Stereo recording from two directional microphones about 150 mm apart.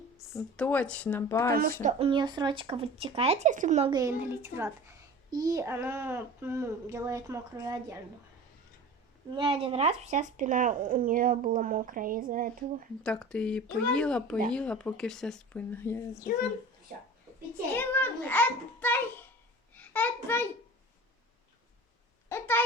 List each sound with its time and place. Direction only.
0.5 s a child's voice: 10° left (ahead or behind)
1.8 s speech: 50° right (ahead or behind)
2.0 s speech: 30° right (ahead or behind); by 3.8 s 55° right (ahead or behind)
3.8 s a child's voice: 25° right (ahead or behind)
4.2 s a child's voice: 15° right (ahead or behind)
9.3 s speech: 35° right (ahead or behind); by 12.6 s 70° right (ahead or behind)
13.0 s a child's voice: 5° left (ahead or behind)
17.7 s a child's voice: 10° left (ahead or behind)
19.7 s a sound: 10° left (ahead or behind)
22.3 s a sound: 15° left (ahead or behind)